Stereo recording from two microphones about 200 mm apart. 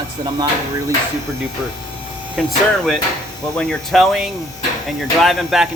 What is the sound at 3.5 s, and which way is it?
Speech, 5° left (ahead or behind).